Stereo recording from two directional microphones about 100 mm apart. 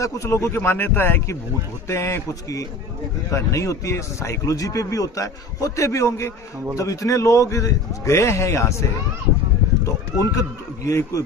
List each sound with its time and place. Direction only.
0.0 s speech: 30° left (ahead or behind)
10.8 s speech: 30° left (ahead or behind)